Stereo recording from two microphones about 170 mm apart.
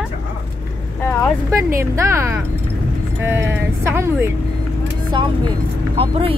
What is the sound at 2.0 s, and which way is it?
Speech, 15° right (ahead or behind).